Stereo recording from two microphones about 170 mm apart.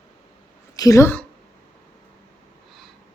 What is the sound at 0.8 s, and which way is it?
Speech, 20° left (ahead or behind).